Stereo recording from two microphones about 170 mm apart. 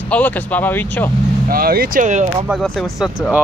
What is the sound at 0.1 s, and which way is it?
Speech, 10° left (ahead or behind).